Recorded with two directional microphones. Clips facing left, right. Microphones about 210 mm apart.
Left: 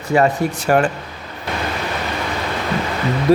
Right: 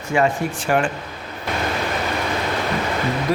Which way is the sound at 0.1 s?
40° left (ahead or behind).